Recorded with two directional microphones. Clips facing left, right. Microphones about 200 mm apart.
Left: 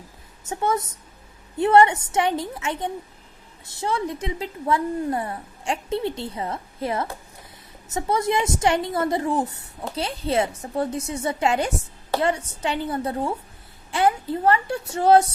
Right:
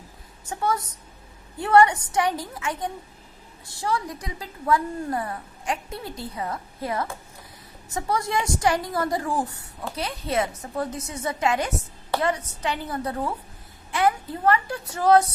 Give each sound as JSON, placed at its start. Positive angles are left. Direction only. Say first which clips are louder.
{"t": 0.4, "sound": "a woman's voice", "louder": "left 2 dB", "side_deg": 25}